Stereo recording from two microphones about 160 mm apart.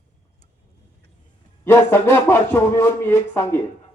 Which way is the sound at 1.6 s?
15° left (ahead or behind).